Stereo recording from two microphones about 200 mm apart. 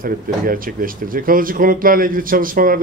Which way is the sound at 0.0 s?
45° right (ahead or behind).